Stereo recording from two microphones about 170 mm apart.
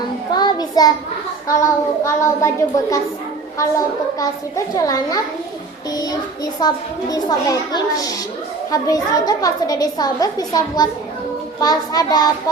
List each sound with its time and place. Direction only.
0.3 s child singing: 25° left (ahead or behind)
2.0 s a woman's voice: 15° left (ahead or behind)